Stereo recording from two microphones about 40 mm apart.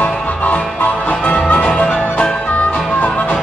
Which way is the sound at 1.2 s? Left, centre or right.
Left.